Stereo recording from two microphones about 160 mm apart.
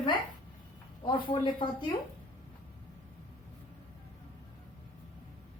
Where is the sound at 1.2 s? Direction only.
30° left (ahead or behind).